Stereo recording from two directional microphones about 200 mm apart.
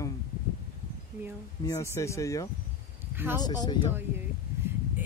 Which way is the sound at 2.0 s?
15° left (ahead or behind).